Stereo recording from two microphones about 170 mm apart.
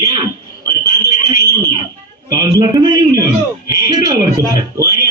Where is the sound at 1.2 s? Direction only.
20° right (ahead or behind).